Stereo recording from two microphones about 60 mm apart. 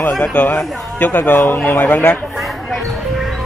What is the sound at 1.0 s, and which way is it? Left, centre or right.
A man's voice, left.